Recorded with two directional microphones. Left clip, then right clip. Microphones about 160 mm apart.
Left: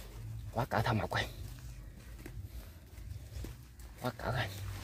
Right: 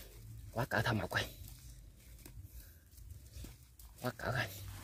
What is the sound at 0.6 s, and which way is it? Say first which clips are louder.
Speech: left 2 dB; 40° right (ahead or behind).